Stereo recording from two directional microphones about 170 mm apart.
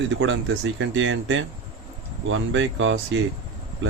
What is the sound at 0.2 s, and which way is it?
Speech, 90° right.